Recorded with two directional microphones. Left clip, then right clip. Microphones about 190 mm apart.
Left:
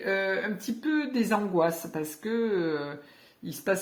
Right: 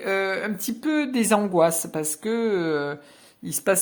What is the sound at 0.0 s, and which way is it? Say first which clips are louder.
Speech: right 3 dB; 40° right (ahead or behind).